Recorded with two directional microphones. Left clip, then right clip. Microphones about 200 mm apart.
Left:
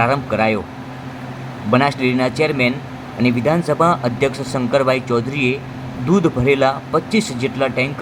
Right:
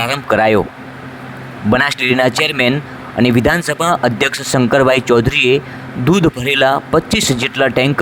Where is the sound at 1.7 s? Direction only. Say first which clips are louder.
Right 3 dB; 35° right (ahead or behind).